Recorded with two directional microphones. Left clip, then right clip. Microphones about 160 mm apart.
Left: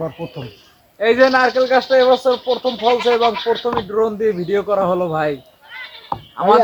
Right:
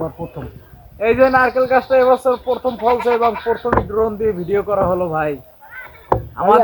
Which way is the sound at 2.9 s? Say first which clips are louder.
Left 1 dB; 30° left (ahead or behind).